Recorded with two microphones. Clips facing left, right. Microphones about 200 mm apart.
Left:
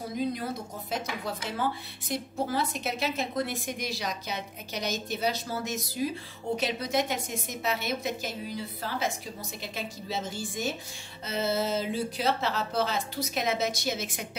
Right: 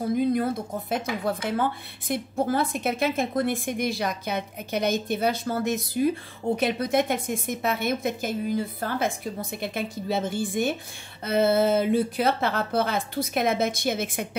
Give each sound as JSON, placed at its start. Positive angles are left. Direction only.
{"t": 0.1, "sound": "speech", "side_deg": -55}